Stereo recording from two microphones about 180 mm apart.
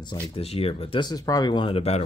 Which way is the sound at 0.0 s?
30° left (ahead or behind).